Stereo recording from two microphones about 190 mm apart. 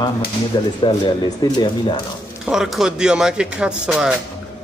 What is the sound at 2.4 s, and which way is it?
Speech, centre (ahead or behind).